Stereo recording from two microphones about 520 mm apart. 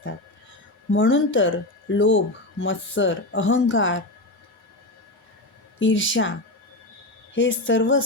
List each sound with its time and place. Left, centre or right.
0.9 s speech: left
5.8 s speech: left
7.3 s speech: left